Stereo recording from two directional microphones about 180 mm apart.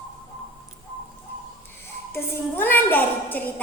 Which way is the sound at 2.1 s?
10° left (ahead or behind).